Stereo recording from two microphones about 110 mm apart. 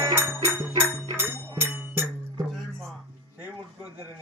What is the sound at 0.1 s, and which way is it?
Music, 25° right (ahead or behind).